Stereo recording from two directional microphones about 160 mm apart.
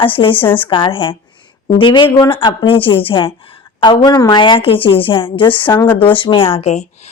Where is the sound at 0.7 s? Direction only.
35° left (ahead or behind).